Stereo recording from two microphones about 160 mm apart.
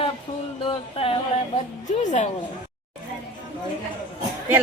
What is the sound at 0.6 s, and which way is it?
Speech, 35° left (ahead or behind).